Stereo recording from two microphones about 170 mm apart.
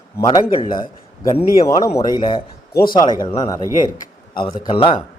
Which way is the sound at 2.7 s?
60° left (ahead or behind).